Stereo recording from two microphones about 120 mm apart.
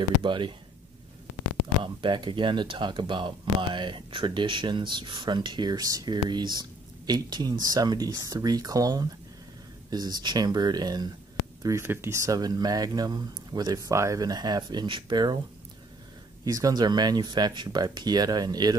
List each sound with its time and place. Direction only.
0.2 s speech: 40° right (ahead or behind)
1.8 s speech: 40° right (ahead or behind)
11.6 s speech: 20° right (ahead or behind); by 15.3 s 40° right (ahead or behind)
16.4 s speech: 30° right (ahead or behind)